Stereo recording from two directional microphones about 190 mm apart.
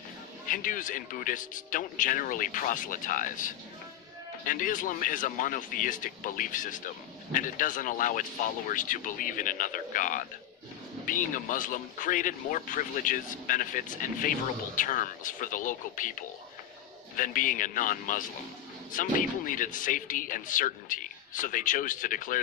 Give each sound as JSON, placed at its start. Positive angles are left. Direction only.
{"t": 0.5, "sound": "speech", "side_deg": 45}